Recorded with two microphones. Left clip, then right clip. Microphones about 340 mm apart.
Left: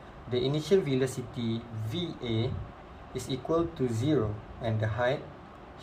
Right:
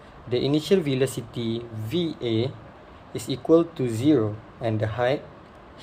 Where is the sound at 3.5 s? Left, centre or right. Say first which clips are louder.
Right 9 dB; right.